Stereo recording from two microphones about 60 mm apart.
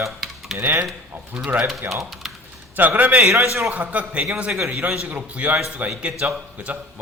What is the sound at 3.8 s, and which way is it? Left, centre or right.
Speech, right.